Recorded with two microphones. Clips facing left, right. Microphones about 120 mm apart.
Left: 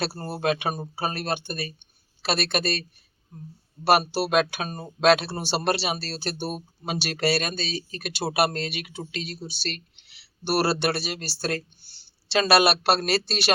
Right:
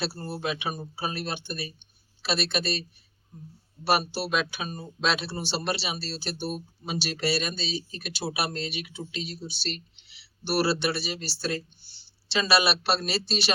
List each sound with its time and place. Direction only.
0.0 s speech: 50° left (ahead or behind)
3.8 s speech: 50° left (ahead or behind)